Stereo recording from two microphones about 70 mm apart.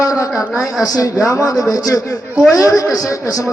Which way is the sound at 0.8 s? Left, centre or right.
Left.